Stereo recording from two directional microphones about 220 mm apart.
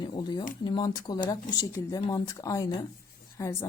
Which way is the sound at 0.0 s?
20° left (ahead or behind).